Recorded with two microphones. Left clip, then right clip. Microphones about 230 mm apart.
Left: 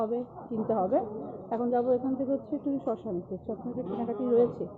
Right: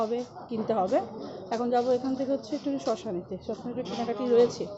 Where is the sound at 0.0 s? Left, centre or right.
Centre.